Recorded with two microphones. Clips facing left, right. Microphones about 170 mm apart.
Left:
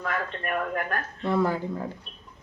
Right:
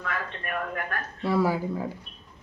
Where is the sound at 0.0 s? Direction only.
40° left (ahead or behind).